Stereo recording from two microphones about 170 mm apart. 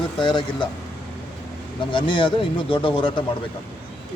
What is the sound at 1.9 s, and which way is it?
Speech, 30° left (ahead or behind).